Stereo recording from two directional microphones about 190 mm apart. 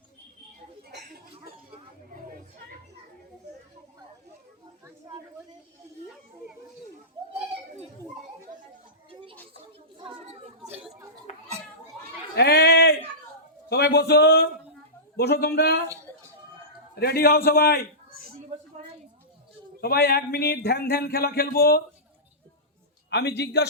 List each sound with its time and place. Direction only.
12.4 s a sound: 60° left (ahead or behind)
13.7 s a man's voice: 60° left (ahead or behind)
16.9 s a man's voice: 55° left (ahead or behind)
18.4 s a sound: 35° right (ahead or behind)
19.8 s speech: 55° left (ahead or behind)
23.0 s a man's voice: 65° left (ahead or behind)